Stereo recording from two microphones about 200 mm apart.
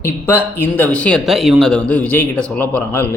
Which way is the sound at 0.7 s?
5° left (ahead or behind).